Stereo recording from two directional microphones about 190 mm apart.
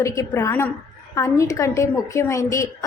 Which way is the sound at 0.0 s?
15° left (ahead or behind).